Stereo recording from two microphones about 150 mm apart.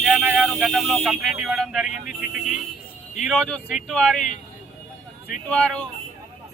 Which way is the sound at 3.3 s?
Centre (ahead or behind).